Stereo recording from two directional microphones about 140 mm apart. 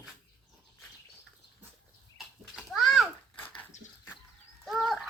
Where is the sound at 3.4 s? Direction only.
10° left (ahead or behind).